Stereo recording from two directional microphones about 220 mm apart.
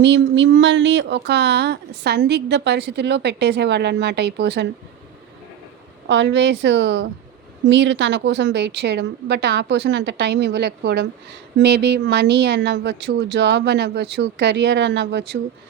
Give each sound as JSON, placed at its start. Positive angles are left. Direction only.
{"t": 0.0, "sound": "speech", "side_deg": -55}
{"t": 6.1, "sound": "speech", "side_deg": -55}